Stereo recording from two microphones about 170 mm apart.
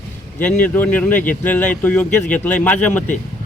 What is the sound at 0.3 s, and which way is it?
Speech, 10° left (ahead or behind).